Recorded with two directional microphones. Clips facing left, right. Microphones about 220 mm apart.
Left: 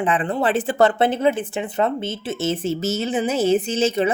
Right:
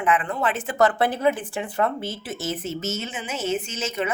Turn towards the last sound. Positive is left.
turn(degrees=30)  # may be behind; listen again after turning